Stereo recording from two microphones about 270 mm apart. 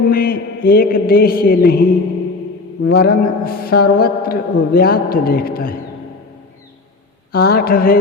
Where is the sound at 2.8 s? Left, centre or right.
Left.